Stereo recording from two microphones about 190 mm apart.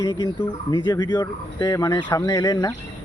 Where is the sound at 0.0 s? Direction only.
20° left (ahead or behind).